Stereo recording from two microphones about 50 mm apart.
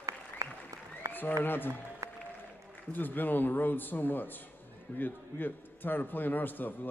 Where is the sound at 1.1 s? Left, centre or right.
Left.